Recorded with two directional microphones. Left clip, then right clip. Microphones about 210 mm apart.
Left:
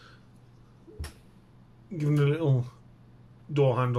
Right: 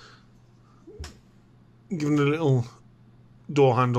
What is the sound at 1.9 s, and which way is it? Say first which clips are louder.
Speech: right 5 dB; 45° right (ahead or behind).